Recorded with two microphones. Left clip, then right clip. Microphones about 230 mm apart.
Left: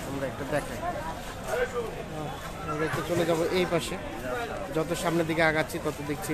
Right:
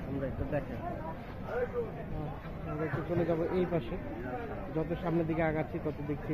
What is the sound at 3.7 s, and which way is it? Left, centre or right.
Speech, centre.